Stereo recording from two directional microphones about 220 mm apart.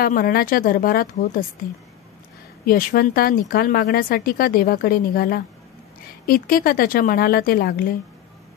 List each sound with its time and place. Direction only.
0.0 s a woman's voice: 40° left (ahead or behind)
2.6 s a woman's voice: 40° left (ahead or behind)